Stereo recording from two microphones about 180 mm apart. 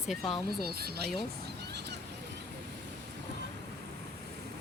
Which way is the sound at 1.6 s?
70° right (ahead or behind).